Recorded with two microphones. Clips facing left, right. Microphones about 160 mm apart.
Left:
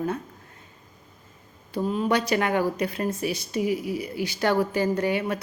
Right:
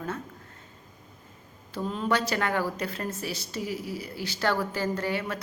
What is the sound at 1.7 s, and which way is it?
A woman's voice, 10° left (ahead or behind).